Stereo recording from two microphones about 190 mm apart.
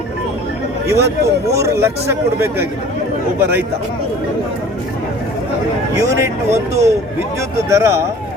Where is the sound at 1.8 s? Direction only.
15° right (ahead or behind).